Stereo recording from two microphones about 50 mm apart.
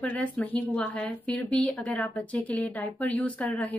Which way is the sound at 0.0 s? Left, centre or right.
Left.